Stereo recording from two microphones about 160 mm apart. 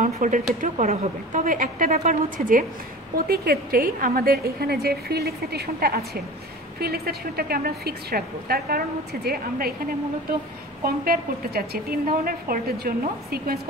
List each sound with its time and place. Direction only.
0.0 s a woman's voice: 55° right (ahead or behind)
3.2 s a woman's voice: 70° right (ahead or behind)
11.1 s a woman's voice: 70° right (ahead or behind)